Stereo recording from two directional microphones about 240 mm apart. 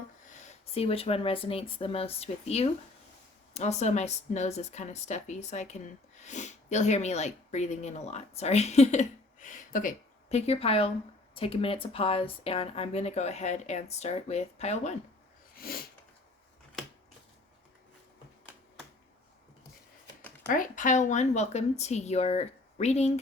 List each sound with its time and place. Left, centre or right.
0.3 s speech: left
15.6 s a sound: left
20.5 s speech: left